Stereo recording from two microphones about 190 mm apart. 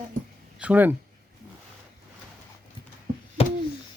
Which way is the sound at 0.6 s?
10° right (ahead or behind).